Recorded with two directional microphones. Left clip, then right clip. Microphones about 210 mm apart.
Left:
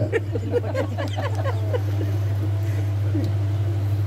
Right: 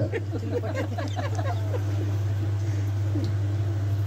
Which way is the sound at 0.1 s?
40° left (ahead or behind).